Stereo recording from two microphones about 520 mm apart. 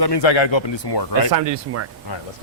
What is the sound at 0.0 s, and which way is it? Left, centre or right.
Speech, left.